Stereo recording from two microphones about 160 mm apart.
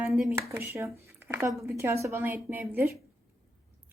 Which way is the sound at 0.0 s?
5° right (ahead or behind).